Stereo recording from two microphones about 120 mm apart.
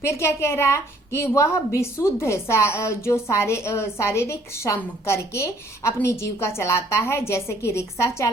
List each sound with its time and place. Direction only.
0.0 s a woman's voice: 20° left (ahead or behind)